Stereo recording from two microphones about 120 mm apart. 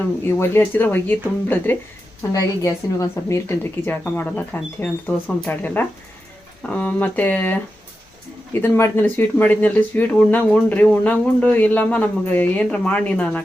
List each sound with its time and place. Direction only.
0.3 s speech: 20° left (ahead or behind)
2.3 s speech: 30° left (ahead or behind); by 13.4 s 10° left (ahead or behind)